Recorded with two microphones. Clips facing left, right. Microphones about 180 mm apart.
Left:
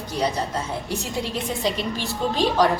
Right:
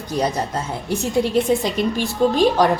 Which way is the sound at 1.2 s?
50° right (ahead or behind).